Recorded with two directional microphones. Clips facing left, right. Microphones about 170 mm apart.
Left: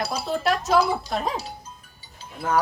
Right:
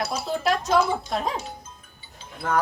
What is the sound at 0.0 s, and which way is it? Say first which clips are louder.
Music: even; 30° left (ahead or behind).